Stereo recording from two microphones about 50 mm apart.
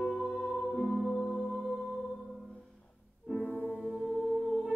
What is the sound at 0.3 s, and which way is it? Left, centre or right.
Music, centre.